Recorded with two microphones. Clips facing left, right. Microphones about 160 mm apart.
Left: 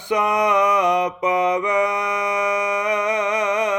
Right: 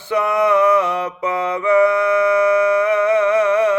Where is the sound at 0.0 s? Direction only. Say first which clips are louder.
Right 2 dB; 15° left (ahead or behind).